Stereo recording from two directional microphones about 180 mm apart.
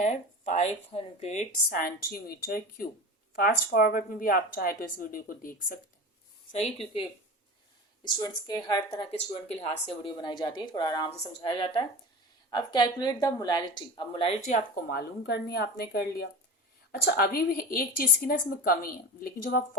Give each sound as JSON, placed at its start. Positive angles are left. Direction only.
{"t": 0.0, "sound": "speech", "side_deg": 40}
{"t": 1.7, "sound": "a woman's voice", "side_deg": 55}
{"t": 6.6, "sound": "a woman's voice", "side_deg": 35}
{"t": 14.8, "sound": "a woman's voice", "side_deg": 60}